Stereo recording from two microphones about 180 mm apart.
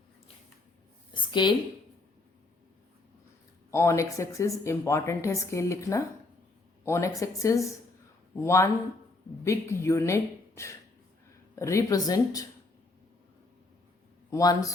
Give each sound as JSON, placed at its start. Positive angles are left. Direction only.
{"t": 1.1, "sound": "a sound", "side_deg": 25}
{"t": 3.7, "sound": "speech", "side_deg": 15}
{"t": 14.3, "sound": "speech", "side_deg": 20}